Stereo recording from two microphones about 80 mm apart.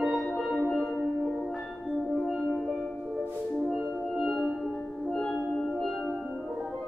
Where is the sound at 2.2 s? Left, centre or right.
Centre.